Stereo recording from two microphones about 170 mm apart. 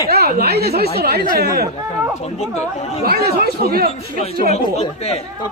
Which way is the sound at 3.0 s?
65° right (ahead or behind).